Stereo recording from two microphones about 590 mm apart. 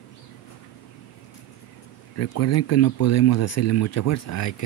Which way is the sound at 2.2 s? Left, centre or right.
Left.